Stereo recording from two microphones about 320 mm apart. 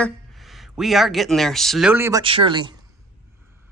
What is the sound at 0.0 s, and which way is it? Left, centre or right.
Speech, centre.